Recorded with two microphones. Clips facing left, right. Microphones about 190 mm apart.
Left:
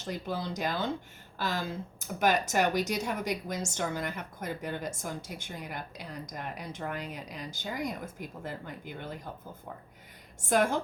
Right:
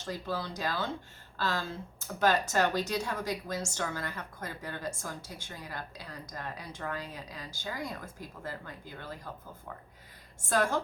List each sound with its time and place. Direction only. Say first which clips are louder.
0.0 s speech: left 1 dB; 20° left (ahead or behind)
10.4 s speech: left 3 dB; 15° left (ahead or behind)